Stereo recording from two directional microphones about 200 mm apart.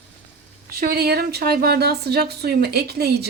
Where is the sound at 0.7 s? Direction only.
50° right (ahead or behind).